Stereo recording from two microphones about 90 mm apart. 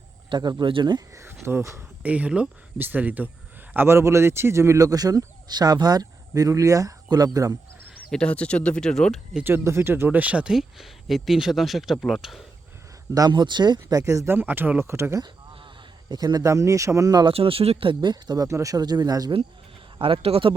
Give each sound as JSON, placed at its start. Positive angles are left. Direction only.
{"t": 0.3, "sound": "speech", "side_deg": -55}
{"t": 1.1, "sound": "speech", "side_deg": -30}
{"t": 2.0, "sound": "speech", "side_deg": -15}
{"t": 3.8, "sound": "speech", "side_deg": -30}
{"t": 8.1, "sound": "speech", "side_deg": 10}
{"t": 9.4, "sound": "speech", "side_deg": -25}
{"t": 13.1, "sound": "speech", "side_deg": -50}
{"t": 14.3, "sound": "speech", "side_deg": -20}
{"t": 16.0, "sound": "speech", "side_deg": -50}
{"t": 17.2, "sound": "speech", "side_deg": -90}
{"t": 18.4, "sound": "speech", "side_deg": -35}
{"t": 20.0, "sound": "speech", "side_deg": -85}